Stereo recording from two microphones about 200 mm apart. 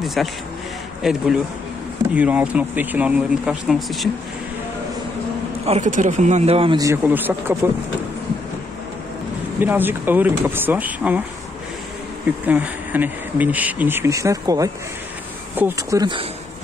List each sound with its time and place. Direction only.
0.0 s speech: centre (ahead or behind)
5.7 s speech: 35° right (ahead or behind); by 7.5 s 10° right (ahead or behind)
9.6 s speech: 10° right (ahead or behind)
12.4 s speech: 10° right (ahead or behind)